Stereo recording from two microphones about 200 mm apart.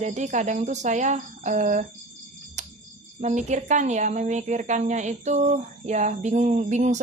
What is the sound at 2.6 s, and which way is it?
Cricket, 35° right (ahead or behind).